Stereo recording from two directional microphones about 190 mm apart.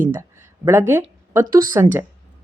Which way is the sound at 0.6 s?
15° right (ahead or behind).